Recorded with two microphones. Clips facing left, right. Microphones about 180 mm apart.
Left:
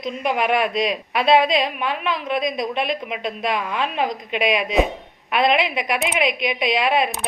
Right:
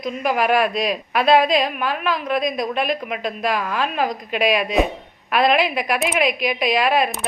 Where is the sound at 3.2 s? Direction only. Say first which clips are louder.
Right 1 dB; 25° left (ahead or behind).